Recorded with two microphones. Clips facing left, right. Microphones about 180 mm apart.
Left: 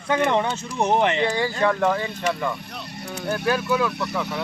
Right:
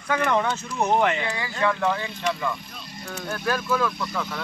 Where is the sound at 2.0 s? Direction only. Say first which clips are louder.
Left 2 dB; 55° left (ahead or behind).